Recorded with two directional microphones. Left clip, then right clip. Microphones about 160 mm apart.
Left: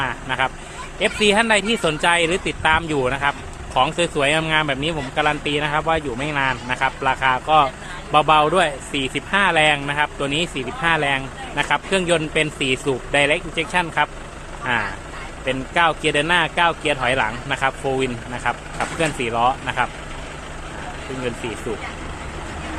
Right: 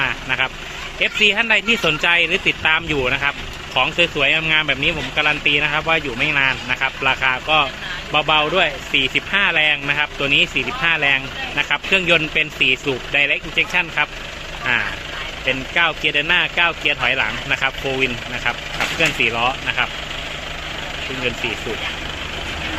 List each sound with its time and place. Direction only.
0.0 s vehicle: 10° left (ahead or behind)
0.9 s speech: 20° left (ahead or behind)